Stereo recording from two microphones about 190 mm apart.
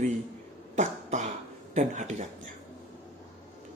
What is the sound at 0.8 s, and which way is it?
Cough, 40° right (ahead or behind).